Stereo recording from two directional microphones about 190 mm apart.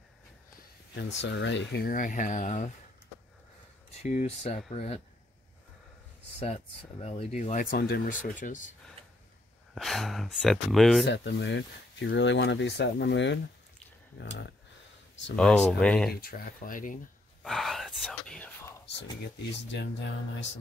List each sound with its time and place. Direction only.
0.9 s speech: 70° left (ahead or behind); by 2.7 s 40° left (ahead or behind)
4.0 s speech: 40° left (ahead or behind)
6.4 s speech: 30° left (ahead or behind)
9.8 s speech: centre (ahead or behind)
11.1 s speech: 70° left (ahead or behind)
15.3 s speech: 5° left (ahead or behind)
16.1 s speech: 50° left (ahead or behind)
17.4 s speech: centre (ahead or behind)
19.5 s speech: 70° left (ahead or behind)